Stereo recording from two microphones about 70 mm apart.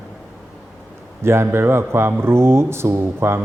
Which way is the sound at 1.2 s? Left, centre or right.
Right.